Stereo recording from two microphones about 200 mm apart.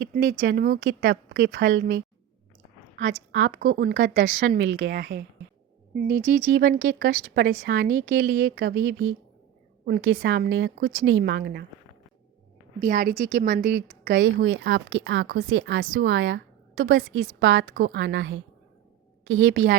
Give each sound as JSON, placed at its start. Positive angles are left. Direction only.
{"t": 0.0, "sound": "a woman's voice", "side_deg": -45}
{"t": 3.0, "sound": "speech", "side_deg": -70}
{"t": 6.2, "sound": "speech", "side_deg": -70}
{"t": 7.6, "sound": "a woman's voice", "side_deg": -45}
{"t": 7.9, "sound": "speech", "side_deg": -80}
{"t": 11.2, "sound": "speech", "side_deg": -55}
{"t": 12.8, "sound": "a woman's voice", "side_deg": -45}
{"t": 14.4, "sound": "speech", "side_deg": -70}
{"t": 19.3, "sound": "speech", "side_deg": -75}